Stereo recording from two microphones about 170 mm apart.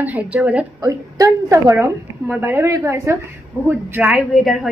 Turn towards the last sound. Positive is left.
turn(degrees=0)  # may be behind; listen again after turning